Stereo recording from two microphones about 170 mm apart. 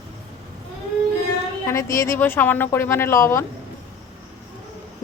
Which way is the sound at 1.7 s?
15° left (ahead or behind).